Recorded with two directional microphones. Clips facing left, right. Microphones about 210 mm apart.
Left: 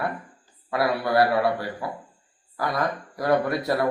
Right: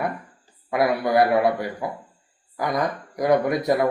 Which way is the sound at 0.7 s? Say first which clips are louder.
Right 3 dB; 20° right (ahead or behind).